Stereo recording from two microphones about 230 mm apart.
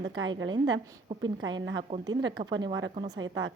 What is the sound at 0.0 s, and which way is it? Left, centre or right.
A woman's voice, right.